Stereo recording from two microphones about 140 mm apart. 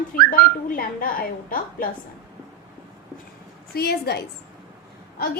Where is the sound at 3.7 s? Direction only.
90° left.